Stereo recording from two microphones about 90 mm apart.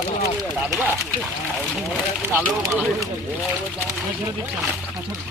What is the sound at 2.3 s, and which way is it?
Speech, 35° right (ahead or behind).